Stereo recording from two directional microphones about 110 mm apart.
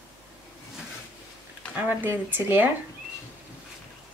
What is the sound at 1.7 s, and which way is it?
Speech, 15° right (ahead or behind).